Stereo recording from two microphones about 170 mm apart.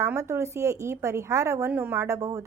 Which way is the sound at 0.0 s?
15° right (ahead or behind).